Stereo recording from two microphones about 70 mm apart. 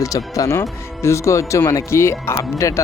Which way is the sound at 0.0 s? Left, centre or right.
Left.